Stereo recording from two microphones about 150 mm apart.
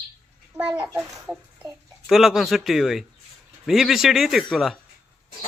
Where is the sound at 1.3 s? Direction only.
Centre (ahead or behind).